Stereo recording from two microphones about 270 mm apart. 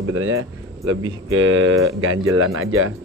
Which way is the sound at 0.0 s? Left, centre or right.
Right.